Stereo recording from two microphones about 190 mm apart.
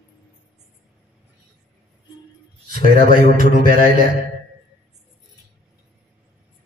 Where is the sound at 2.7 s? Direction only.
50° right (ahead or behind).